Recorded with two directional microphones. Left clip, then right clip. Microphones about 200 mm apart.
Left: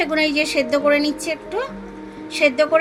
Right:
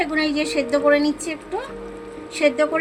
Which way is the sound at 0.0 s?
55° left (ahead or behind).